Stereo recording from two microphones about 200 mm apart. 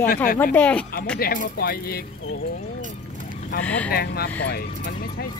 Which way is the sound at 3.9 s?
50° left (ahead or behind).